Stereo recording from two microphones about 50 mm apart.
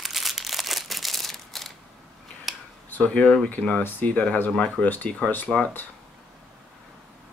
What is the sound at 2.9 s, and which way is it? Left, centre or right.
Speech, left.